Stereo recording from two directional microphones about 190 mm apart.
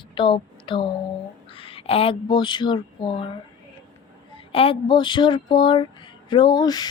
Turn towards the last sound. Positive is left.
turn(degrees=20)  # may be behind; listen again after turning